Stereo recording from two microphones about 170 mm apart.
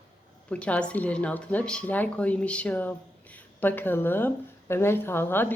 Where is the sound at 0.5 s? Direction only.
5° left (ahead or behind).